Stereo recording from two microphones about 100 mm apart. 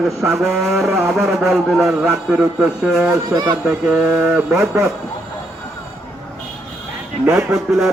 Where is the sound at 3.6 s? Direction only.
10° right (ahead or behind).